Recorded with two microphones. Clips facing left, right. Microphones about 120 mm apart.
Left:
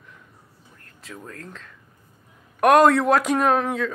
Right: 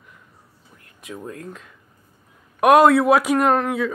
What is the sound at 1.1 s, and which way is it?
A man's voice, 20° right (ahead or behind).